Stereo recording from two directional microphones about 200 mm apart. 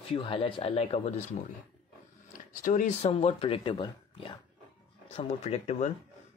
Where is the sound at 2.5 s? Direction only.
40° left (ahead or behind).